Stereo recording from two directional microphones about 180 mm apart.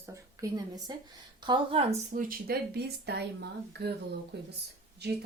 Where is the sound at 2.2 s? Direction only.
50° right (ahead or behind).